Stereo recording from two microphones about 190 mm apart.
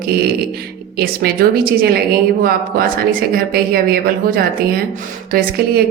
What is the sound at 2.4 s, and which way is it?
Speech, 50° right (ahead or behind).